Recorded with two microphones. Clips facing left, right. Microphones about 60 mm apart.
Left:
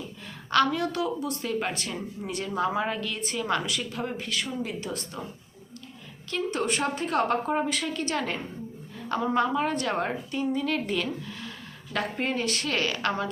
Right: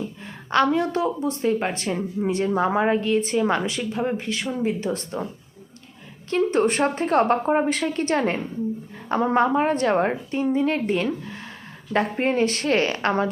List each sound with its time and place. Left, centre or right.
0.5 s a woman's voice: right
6.3 s a woman's voice: right